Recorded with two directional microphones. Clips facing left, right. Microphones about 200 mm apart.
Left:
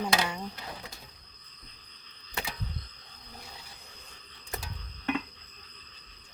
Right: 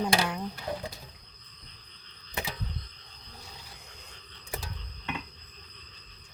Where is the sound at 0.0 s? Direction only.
5° right (ahead or behind).